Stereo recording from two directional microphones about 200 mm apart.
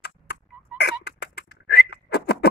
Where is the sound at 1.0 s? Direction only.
55° left (ahead or behind).